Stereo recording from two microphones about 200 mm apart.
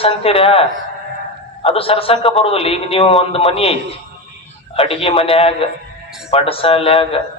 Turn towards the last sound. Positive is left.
turn(degrees=30)  # may be behind; listen again after turning